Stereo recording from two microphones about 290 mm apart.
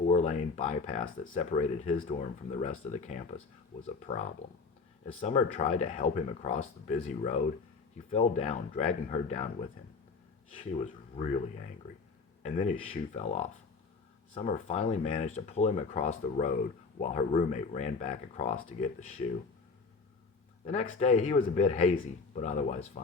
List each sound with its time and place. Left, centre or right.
0.0 s speech: left
12.4 s speech: left
20.7 s speech: left